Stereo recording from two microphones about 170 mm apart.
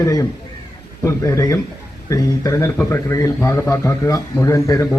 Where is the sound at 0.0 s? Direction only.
20° left (ahead or behind).